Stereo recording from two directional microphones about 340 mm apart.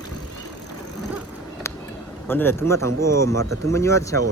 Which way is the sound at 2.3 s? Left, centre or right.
Centre.